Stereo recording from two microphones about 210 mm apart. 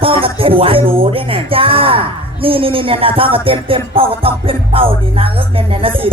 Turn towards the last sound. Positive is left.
turn(degrees=-25)  # may be behind; listen again after turning